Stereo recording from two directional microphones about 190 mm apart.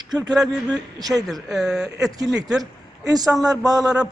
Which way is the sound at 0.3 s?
Centre (ahead or behind).